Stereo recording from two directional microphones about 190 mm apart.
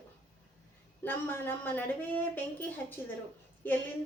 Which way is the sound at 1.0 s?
10° left (ahead or behind).